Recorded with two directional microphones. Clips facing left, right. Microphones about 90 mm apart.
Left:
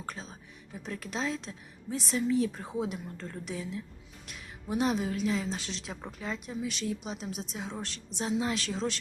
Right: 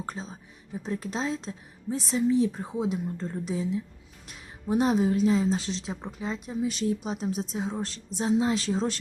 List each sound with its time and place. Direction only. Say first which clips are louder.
0.0 s speech: right 4 dB; 30° right (ahead or behind)